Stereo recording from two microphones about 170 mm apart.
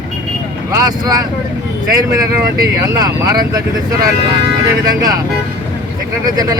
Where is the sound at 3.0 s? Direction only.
20° right (ahead or behind).